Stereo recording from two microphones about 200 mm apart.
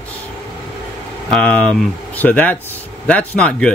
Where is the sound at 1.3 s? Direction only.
5° left (ahead or behind).